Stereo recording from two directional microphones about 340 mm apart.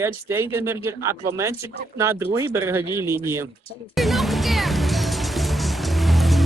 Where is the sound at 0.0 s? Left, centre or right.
Centre.